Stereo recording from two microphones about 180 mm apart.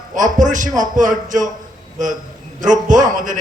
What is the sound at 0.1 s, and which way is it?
A man's voice, 45° right (ahead or behind).